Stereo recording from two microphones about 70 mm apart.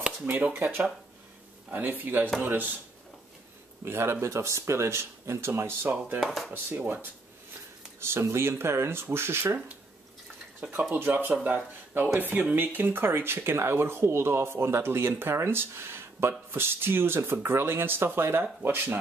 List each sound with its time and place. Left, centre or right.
0.0 s a sound: centre
0.5 s speech: right
3.8 s speech: right
6.2 s speech: centre
6.5 s speech: right
10.7 s speech: right